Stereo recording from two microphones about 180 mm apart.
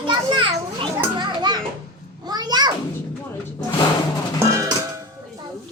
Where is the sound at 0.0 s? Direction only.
25° right (ahead or behind).